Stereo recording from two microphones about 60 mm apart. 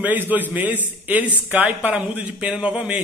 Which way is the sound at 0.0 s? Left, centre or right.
Right.